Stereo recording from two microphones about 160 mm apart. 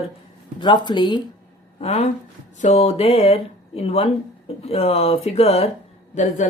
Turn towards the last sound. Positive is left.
turn(degrees=50)  # may be behind; listen again after turning